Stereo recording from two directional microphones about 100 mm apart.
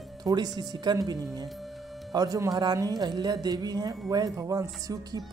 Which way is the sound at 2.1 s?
35° right (ahead or behind).